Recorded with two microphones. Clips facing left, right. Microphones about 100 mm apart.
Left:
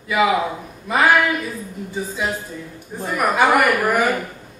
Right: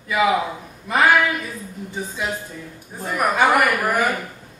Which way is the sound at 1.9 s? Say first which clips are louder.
Left 2 dB; centre (ahead or behind).